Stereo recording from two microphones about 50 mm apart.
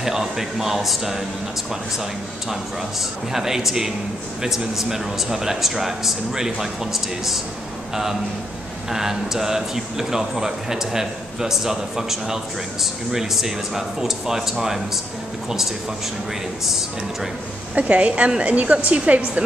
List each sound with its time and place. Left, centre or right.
0.0 s speech: centre
3.3 s a man's voice: centre
16.6 s speech: centre
17.7 s a woman's voice: right